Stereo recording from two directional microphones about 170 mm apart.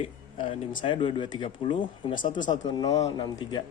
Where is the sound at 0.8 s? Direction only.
30° left (ahead or behind).